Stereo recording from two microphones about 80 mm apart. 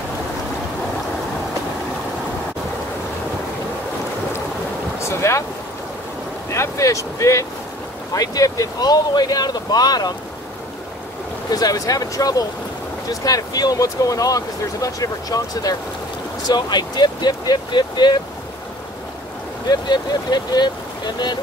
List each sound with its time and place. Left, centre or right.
5.0 s boat: left
6.5 s speech: left
11.5 s speech: left
16.4 s speech: left
19.7 s speech: left